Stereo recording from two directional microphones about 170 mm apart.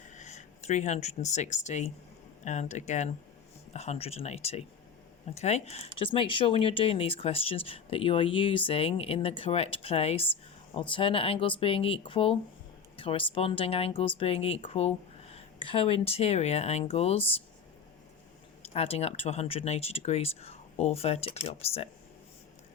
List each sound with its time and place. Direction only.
0.1 s speech: 45° left (ahead or behind)
18.6 s speech: 35° left (ahead or behind)